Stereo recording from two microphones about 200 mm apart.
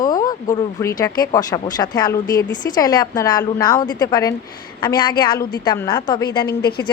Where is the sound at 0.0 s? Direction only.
20° left (ahead or behind).